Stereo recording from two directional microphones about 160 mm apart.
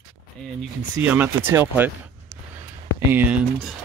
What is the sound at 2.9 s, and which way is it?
Speech, 10° right (ahead or behind).